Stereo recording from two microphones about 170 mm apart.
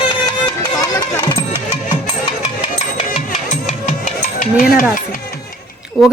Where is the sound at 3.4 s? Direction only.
45° left (ahead or behind).